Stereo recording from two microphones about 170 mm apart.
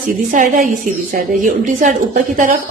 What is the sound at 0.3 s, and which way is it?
A woman's voice, 50° right (ahead or behind).